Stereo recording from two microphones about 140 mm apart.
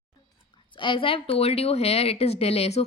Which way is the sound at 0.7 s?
35° left (ahead or behind).